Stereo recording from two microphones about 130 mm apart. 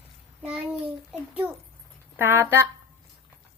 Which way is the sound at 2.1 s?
15° right (ahead or behind).